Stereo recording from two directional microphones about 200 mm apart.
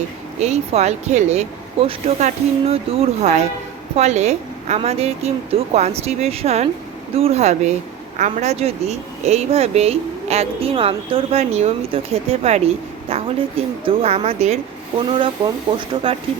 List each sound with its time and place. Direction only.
0.3 s speech: 35° right (ahead or behind)
15.7 s speech: 25° right (ahead or behind)